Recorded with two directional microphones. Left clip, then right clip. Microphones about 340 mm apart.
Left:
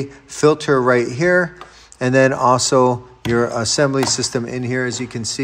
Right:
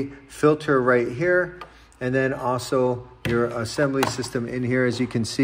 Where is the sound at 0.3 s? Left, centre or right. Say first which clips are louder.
Left 5 dB; centre.